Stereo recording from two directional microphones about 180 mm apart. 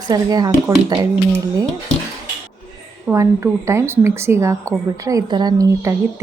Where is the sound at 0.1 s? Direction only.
20° right (ahead or behind).